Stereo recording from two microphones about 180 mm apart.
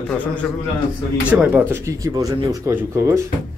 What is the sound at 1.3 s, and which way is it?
Speech, 10° right (ahead or behind).